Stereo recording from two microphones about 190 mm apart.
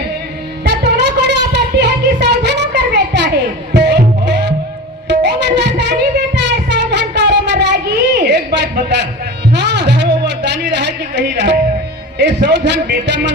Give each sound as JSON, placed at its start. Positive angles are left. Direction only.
{"t": 0.6, "sound": "music", "side_deg": -65}
{"t": 6.3, "sound": "a sound", "side_deg": -65}
{"t": 12.2, "sound": "a man's voice", "side_deg": -65}